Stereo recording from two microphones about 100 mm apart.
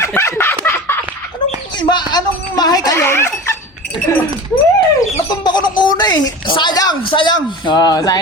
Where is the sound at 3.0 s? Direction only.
25° left (ahead or behind).